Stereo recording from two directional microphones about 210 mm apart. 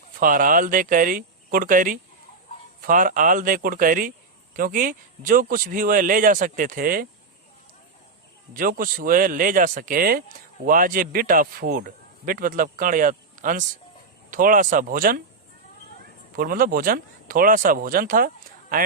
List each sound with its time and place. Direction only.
0.2 s speech: 40° right (ahead or behind)
8.5 s speech: 40° right (ahead or behind)
16.3 s speech: 45° right (ahead or behind)